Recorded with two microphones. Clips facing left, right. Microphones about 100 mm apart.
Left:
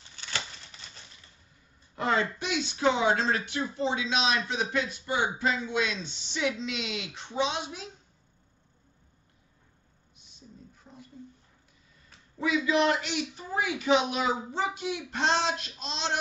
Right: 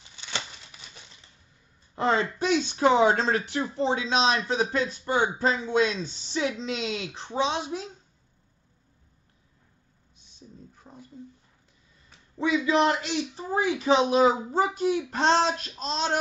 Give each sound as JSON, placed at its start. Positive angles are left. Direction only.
{"t": 0.1, "sound": "scissors", "side_deg": -15}
{"t": 2.0, "sound": "speech", "side_deg": -30}
{"t": 10.9, "sound": "a sound", "side_deg": -35}
{"t": 12.4, "sound": "speech", "side_deg": -30}